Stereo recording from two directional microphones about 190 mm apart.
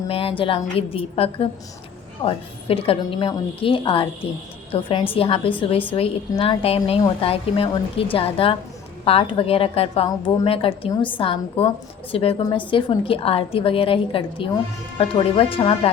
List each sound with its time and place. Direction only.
0.1 s a woman's voice: 30° left (ahead or behind)